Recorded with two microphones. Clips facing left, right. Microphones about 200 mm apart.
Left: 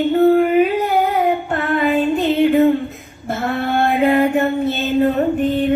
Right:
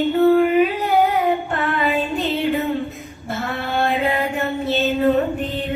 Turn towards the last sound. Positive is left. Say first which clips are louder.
# left 4 dB
turn(degrees=50)  # may be behind; listen again after turning